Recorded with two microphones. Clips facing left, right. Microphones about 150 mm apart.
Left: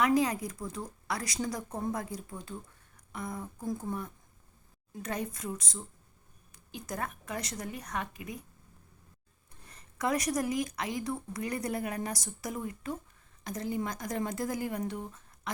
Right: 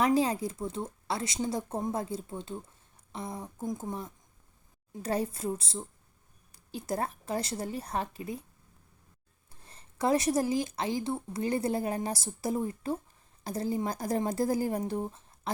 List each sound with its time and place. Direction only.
0.0 s speech: 30° right (ahead or behind)
9.6 s speech: 30° right (ahead or behind)